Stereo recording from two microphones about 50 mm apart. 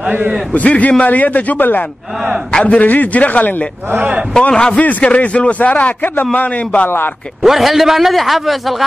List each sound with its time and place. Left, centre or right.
0.6 s a man's voice: left
4.3 s a man's voice: centre
7.4 s a man's voice: centre